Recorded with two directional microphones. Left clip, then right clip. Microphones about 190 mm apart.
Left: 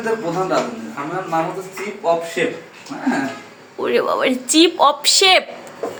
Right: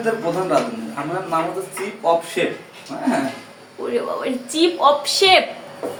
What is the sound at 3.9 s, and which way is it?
A woman's voice, 50° left (ahead or behind).